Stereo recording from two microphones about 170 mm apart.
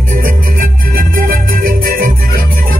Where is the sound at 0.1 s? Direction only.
55° right (ahead or behind).